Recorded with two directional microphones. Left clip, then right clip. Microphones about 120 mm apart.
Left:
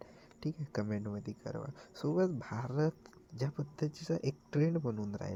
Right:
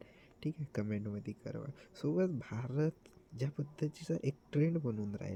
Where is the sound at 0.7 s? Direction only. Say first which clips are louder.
Left 3 dB; 20° right (ahead or behind).